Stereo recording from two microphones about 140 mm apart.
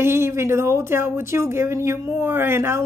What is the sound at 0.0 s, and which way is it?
Speech, 15° right (ahead or behind).